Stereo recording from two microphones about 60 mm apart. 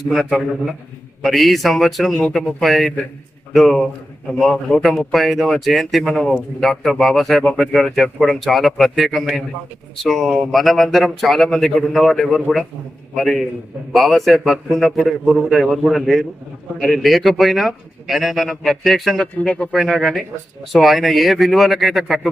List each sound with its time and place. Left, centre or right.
0.1 s speech: centre
19.5 s speech: left
19.7 s speech: centre